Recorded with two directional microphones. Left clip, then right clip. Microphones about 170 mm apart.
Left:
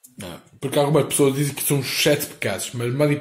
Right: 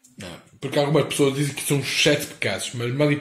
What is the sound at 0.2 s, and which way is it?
Speech, 15° left (ahead or behind).